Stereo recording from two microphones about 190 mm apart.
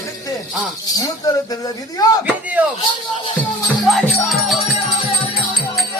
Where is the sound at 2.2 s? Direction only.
10° right (ahead or behind).